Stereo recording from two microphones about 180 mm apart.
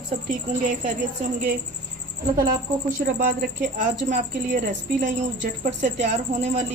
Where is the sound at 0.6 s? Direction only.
45° right (ahead or behind).